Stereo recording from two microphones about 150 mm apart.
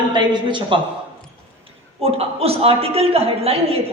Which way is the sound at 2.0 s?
40° right (ahead or behind).